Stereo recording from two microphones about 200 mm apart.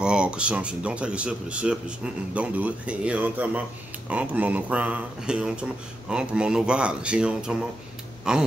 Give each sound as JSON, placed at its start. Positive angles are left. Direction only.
{"t": 0.0, "sound": "speech", "side_deg": -5}